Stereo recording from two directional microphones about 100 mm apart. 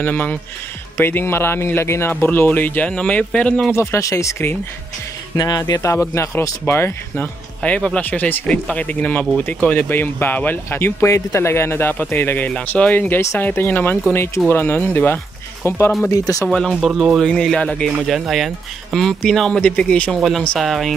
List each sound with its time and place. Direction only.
0.0 s speech: 15° left (ahead or behind)
3.7 s speech: 30° left (ahead or behind)
5.3 s speech: 40° left (ahead or behind)
16.4 s speech: centre (ahead or behind)
17.9 s speech: 5° right (ahead or behind)